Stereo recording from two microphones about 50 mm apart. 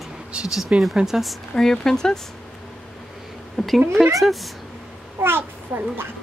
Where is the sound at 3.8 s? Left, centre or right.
Right.